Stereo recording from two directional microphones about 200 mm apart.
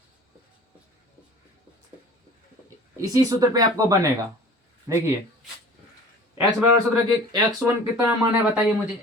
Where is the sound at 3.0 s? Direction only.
15° right (ahead or behind).